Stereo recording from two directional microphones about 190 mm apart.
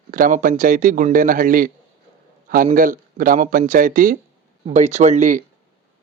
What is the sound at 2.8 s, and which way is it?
A man's voice, 45° right (ahead or behind).